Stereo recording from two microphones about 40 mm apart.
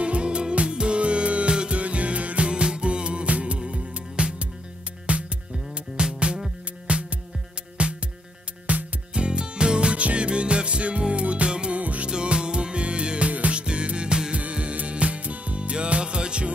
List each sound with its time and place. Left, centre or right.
0.0 s music: right
11.8 s music: right
12.1 s music: right